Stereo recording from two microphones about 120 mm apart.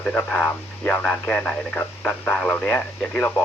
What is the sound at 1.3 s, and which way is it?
Speech, 10° left (ahead or behind).